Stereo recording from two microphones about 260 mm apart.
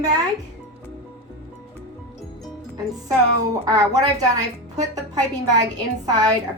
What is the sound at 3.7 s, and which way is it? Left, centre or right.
A woman's voice, centre.